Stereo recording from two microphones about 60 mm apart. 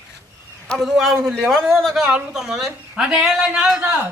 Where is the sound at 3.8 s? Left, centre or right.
Right.